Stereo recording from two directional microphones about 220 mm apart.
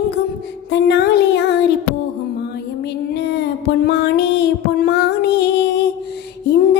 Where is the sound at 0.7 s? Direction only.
50° left (ahead or behind).